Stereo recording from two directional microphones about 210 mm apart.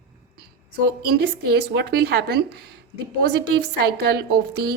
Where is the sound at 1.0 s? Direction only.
50° right (ahead or behind).